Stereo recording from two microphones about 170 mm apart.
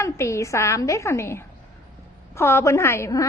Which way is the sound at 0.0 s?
15° left (ahead or behind).